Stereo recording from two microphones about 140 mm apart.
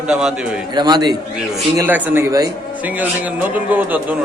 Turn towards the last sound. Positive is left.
turn(degrees=-10)  # may be behind; listen again after turning